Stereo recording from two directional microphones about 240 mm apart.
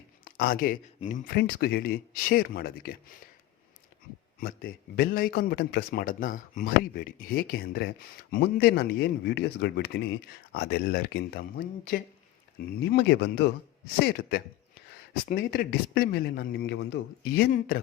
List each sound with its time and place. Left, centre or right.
0.3 s a man's voice: left
4.4 s a man's voice: left